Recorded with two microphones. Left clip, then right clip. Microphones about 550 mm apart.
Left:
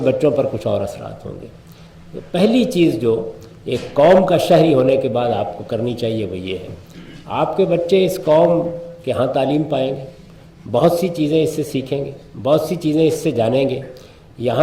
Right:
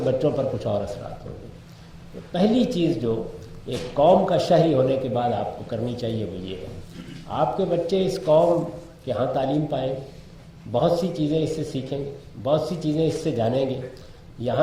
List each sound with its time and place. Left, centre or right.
0.2 s a man's voice: left
2.3 s a man's voice: left